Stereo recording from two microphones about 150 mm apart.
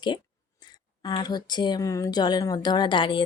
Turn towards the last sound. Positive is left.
turn(degrees=35)  # may be behind; listen again after turning